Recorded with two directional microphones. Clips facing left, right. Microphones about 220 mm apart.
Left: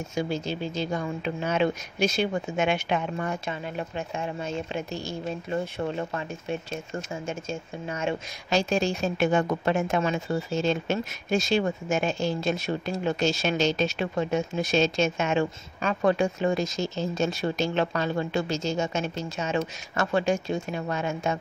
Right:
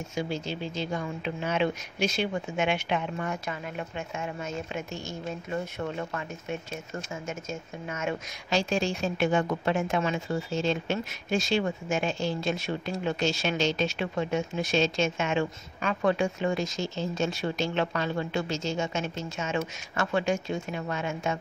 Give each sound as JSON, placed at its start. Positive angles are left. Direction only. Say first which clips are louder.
{"t": 0.1, "sound": "speech", "louder": "left 3 dB", "side_deg": 40}
{"t": 7.9, "sound": "speech", "louder": "left 3 dB", "side_deg": 30}
{"t": 8.5, "sound": "speech", "louder": "left 3 dB", "side_deg": 45}